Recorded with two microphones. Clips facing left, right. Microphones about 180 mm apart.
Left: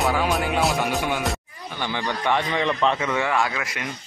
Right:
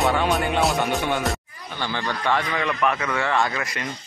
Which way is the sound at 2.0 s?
20° left (ahead or behind).